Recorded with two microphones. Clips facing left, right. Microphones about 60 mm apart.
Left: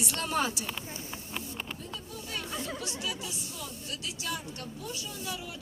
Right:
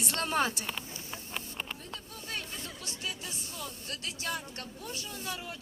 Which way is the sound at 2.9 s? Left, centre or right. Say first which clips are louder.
Left 3 dB; right.